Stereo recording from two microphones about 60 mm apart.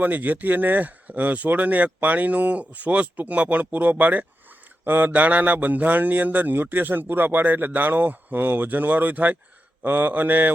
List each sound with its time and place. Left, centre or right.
0.0 s a man's voice: right